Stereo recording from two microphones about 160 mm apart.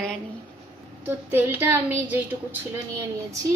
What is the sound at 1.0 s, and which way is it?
Speech, 10° right (ahead or behind).